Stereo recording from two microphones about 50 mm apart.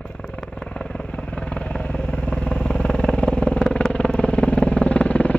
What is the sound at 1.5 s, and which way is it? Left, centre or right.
Vehicle, left.